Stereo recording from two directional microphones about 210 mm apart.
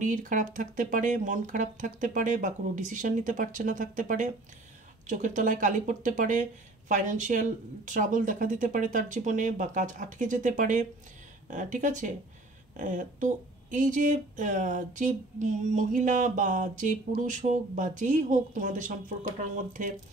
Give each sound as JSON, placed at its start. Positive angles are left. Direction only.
{"t": 0.0, "sound": "speech", "side_deg": -40}